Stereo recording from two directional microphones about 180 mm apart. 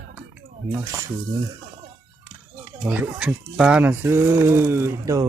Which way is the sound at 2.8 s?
5° right (ahead or behind).